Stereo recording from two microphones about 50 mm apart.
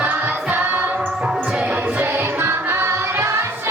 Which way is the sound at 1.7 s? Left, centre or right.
Right.